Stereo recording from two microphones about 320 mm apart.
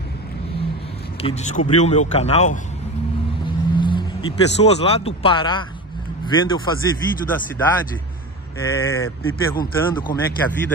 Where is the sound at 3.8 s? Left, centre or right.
Centre.